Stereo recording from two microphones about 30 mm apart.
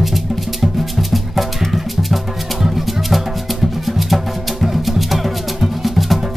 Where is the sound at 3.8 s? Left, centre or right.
Centre.